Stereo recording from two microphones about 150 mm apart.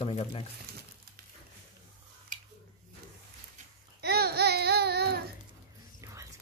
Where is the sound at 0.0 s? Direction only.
40° left (ahead or behind).